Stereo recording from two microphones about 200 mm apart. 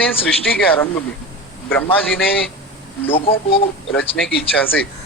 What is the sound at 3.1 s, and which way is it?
Speech, 30° left (ahead or behind).